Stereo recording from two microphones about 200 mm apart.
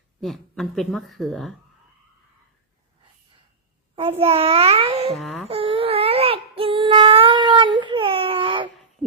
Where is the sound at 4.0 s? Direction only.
30° right (ahead or behind).